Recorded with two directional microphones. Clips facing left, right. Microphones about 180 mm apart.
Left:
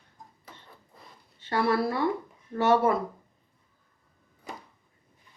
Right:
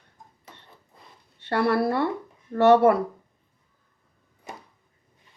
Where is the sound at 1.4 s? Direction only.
65° right (ahead or behind).